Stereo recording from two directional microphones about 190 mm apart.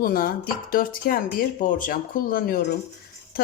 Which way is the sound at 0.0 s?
50° left (ahead or behind).